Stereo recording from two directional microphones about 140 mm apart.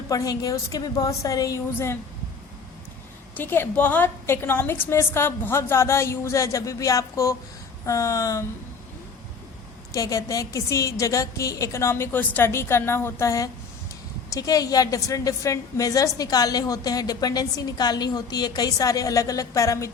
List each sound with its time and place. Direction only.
0.1 s a woman's voice: 25° left (ahead or behind)
3.3 s a woman's voice: 15° left (ahead or behind)
9.9 s a woman's voice: 25° left (ahead or behind)